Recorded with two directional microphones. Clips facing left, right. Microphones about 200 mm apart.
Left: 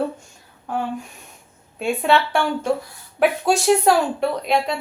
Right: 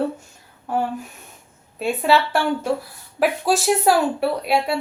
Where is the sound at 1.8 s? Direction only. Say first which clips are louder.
Even; centre (ahead or behind).